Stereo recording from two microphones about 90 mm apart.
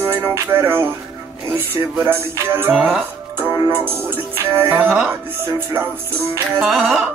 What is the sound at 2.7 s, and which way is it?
Speech, 5° right (ahead or behind).